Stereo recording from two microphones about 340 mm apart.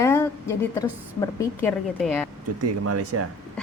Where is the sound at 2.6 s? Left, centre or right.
Right.